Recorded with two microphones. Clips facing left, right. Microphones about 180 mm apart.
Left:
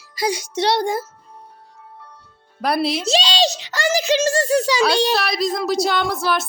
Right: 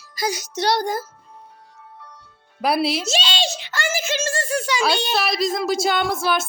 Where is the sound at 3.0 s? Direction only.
35° left (ahead or behind).